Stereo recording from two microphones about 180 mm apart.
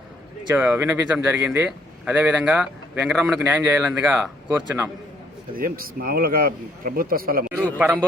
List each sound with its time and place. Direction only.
0.5 s speech: 5° right (ahead or behind)
5.5 s a man's voice: 50° right (ahead or behind)